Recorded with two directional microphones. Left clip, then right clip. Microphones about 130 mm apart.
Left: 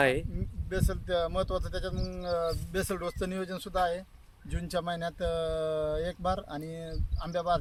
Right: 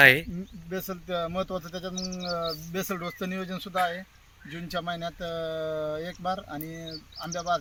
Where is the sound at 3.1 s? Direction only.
40° left (ahead or behind).